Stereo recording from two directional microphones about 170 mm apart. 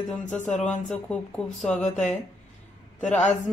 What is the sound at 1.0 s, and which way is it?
Speech, 5° left (ahead or behind).